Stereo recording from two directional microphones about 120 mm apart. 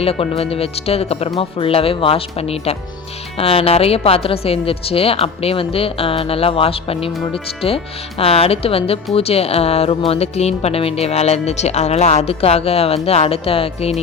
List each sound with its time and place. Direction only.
0.0 s speech: 55° left (ahead or behind)